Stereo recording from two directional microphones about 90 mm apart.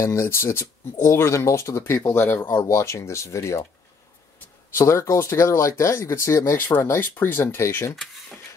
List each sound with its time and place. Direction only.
0.0 s speech: 30° left (ahead or behind)
2.0 s speech: 20° left (ahead or behind)
2.4 s speech: 35° left (ahead or behind)
4.7 s speech: 30° left (ahead or behind)
7.9 s a sound: 5° left (ahead or behind)